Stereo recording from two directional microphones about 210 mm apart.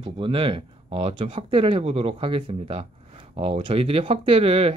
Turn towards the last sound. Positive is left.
turn(degrees=-25)  # may be behind; listen again after turning